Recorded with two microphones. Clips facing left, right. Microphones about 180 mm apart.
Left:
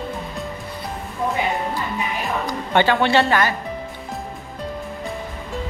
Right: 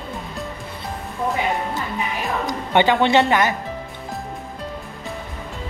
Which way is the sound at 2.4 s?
15° right (ahead or behind).